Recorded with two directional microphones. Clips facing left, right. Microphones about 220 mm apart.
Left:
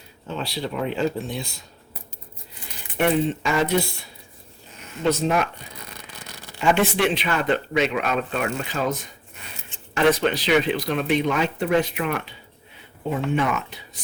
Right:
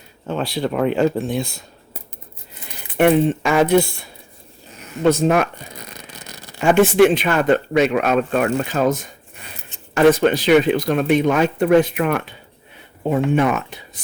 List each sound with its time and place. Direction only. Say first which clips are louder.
0.3 s speech: right 7 dB; 55° right (ahead or behind)
3.0 s speech: right 6 dB; 55° right (ahead or behind)
5.0 s speech: right 6 dB; 55° right (ahead or behind)
6.6 s speech: right 8 dB; 50° right (ahead or behind)